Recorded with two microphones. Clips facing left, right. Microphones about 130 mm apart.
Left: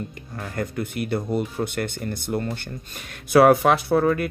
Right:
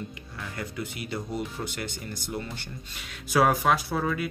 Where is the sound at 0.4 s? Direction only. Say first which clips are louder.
Left 7 dB; 50° left (ahead or behind).